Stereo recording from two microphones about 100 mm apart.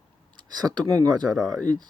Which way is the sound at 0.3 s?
45° right (ahead or behind).